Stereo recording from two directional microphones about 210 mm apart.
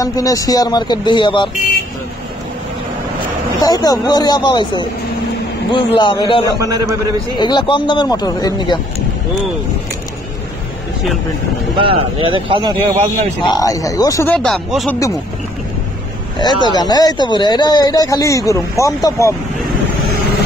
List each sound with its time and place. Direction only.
0.0 s speech: 15° left (ahead or behind)
3.6 s speech: 20° left (ahead or behind)
6.6 s a man's voice: 15° right (ahead or behind)
7.3 s speech: 20° left (ahead or behind)
11.7 s speech: 25° right (ahead or behind)
13.4 s speech: 20° left (ahead or behind); by 15.0 s centre (ahead or behind)
16.3 s speech: 20° left (ahead or behind)